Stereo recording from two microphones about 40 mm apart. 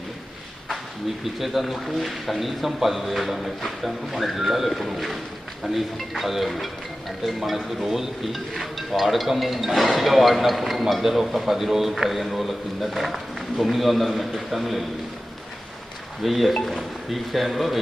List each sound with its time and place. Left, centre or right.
1.4 s speech: centre
16.2 s speech: centre